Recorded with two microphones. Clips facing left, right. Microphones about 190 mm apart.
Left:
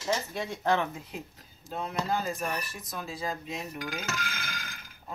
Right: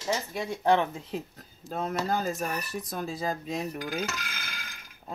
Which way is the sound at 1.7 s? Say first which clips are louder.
Right 2 dB; 45° right (ahead or behind).